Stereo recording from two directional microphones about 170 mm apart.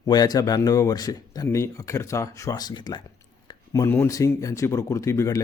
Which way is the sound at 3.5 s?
20° left (ahead or behind).